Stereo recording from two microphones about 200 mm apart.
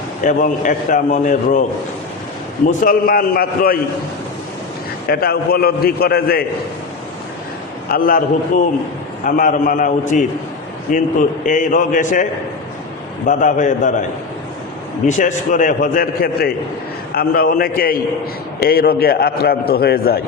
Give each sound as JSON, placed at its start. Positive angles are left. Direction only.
{"t": 0.3, "sound": "a man's voice", "side_deg": 40}
{"t": 2.6, "sound": "a man's voice", "side_deg": 45}
{"t": 5.0, "sound": "a man's voice", "side_deg": 50}
{"t": 7.9, "sound": "a man's voice", "side_deg": 45}
{"t": 9.2, "sound": "a man's voice", "side_deg": 40}
{"t": 13.2, "sound": "a man's voice", "side_deg": 40}
{"t": 15.0, "sound": "a man's voice", "side_deg": 40}